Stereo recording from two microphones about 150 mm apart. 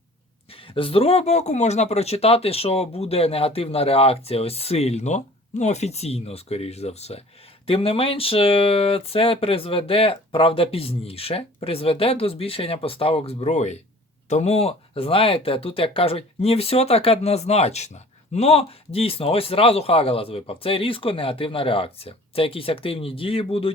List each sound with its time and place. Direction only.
0.5 s speech: 35° left (ahead or behind)